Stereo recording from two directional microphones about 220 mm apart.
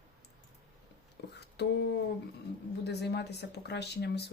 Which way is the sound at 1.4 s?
50° left (ahead or behind).